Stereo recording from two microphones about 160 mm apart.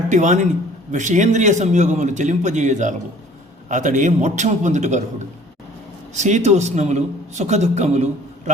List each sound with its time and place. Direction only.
0.1 s a man's voice: 50° right (ahead or behind)
6.1 s a man's voice: 45° right (ahead or behind)